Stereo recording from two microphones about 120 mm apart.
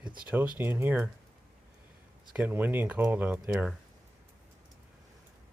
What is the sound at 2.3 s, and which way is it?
Speech, 15° right (ahead or behind).